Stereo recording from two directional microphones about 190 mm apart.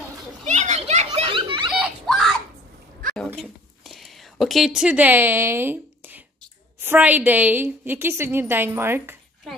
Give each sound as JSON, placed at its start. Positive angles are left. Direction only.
{"t": 0.5, "sound": "children playing", "side_deg": -35}
{"t": 1.7, "sound": "a sound", "side_deg": 0}
{"t": 6.8, "sound": "a woman's voice", "side_deg": -10}